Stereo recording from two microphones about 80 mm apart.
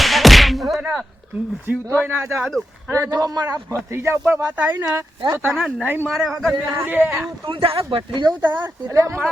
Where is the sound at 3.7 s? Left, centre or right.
Right.